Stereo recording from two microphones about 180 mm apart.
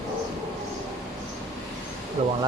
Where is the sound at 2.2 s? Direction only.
35° right (ahead or behind).